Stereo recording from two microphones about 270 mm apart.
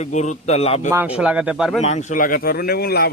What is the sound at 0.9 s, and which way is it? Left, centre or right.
Speech, centre.